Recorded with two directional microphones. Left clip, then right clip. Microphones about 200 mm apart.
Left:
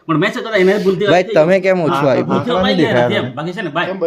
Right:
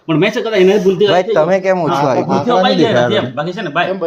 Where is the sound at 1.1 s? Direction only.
35° left (ahead or behind).